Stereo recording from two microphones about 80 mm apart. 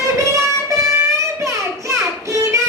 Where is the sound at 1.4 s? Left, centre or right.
Right.